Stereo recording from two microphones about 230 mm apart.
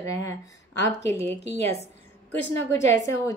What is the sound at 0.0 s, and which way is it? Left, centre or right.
Speech, centre.